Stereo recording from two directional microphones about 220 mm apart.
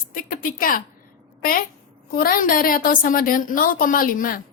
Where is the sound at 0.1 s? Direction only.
40° left (ahead or behind).